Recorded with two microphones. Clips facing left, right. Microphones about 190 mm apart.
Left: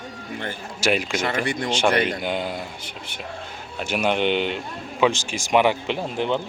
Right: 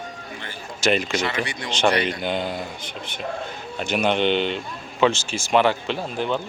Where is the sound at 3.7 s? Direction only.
10° left (ahead or behind).